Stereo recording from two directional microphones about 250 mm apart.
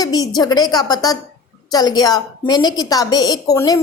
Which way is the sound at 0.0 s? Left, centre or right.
Centre.